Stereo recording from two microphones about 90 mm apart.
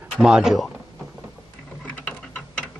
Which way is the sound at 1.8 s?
15° left (ahead or behind).